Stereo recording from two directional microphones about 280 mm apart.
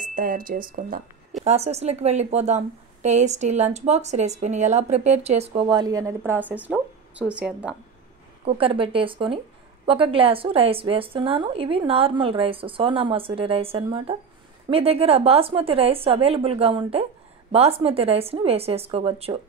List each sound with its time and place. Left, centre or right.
0.0 s a woman's voice: right; by 7.7 s centre
8.5 s a woman's voice: centre